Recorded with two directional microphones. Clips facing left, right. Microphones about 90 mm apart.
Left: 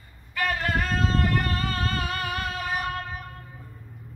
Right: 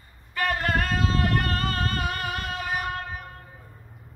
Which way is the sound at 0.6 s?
60° right (ahead or behind).